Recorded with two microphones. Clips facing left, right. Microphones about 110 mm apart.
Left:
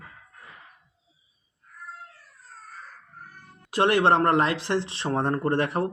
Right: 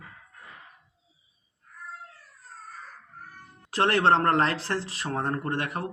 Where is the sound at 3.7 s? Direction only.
15° left (ahead or behind).